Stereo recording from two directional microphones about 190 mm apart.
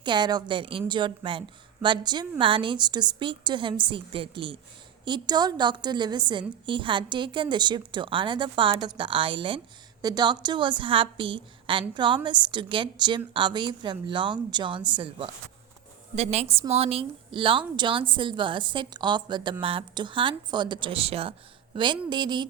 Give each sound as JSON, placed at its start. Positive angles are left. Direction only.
{"t": 0.0, "sound": "a woman's voice", "side_deg": -25}